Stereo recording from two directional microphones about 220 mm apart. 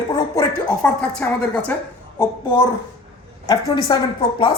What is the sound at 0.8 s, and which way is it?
Speech, 5° left (ahead or behind).